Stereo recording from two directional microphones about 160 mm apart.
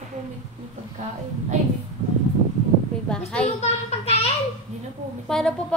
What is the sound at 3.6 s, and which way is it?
Speech, 40° left (ahead or behind).